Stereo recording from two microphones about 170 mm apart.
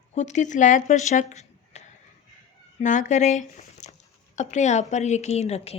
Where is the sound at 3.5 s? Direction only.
45° left (ahead or behind).